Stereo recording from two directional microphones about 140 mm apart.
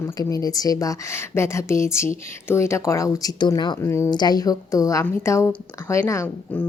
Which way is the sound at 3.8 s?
20° left (ahead or behind).